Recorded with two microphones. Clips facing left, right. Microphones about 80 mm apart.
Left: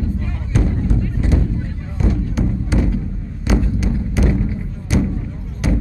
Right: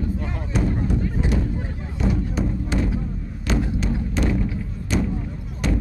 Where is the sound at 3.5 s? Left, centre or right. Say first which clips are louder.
Left 4 dB; centre.